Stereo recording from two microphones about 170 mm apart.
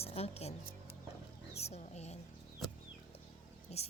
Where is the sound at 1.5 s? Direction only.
40° left (ahead or behind).